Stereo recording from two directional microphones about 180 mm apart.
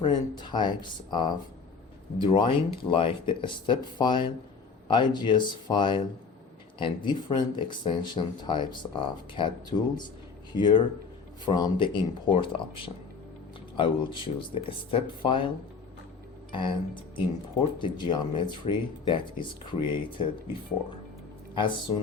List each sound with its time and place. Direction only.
0.0 s speech: 25° left (ahead or behind)
13.7 s speech: 25° left (ahead or behind)
16.5 s speech: 25° left (ahead or behind)
21.5 s speech: 25° left (ahead or behind)